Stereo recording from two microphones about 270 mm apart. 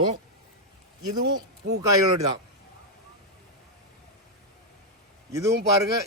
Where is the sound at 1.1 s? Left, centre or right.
Centre.